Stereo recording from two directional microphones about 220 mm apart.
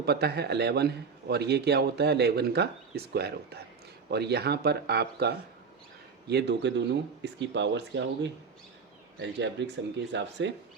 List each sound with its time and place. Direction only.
0.0 s a man's voice: 45° right (ahead or behind)